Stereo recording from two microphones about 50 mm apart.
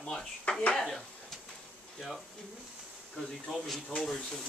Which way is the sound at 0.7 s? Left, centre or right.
Centre.